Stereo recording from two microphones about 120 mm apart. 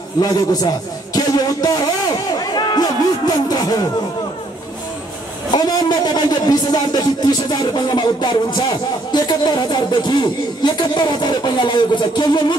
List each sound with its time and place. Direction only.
0.2 s a sound: 35° left (ahead or behind)
3.4 s speech: 35° left (ahead or behind)
5.5 s speech: 35° left (ahead or behind)